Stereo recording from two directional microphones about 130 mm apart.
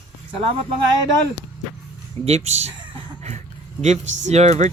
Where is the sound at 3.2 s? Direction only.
60° right (ahead or behind).